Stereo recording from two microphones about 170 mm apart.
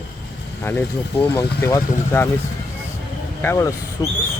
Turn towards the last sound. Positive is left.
turn(degrees=20)  # may be behind; listen again after turning